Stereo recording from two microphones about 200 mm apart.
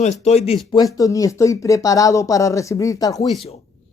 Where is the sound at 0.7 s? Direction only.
15° left (ahead or behind).